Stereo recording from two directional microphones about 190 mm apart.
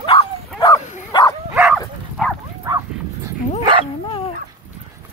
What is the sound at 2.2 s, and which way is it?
Bow-wow, centre (ahead or behind).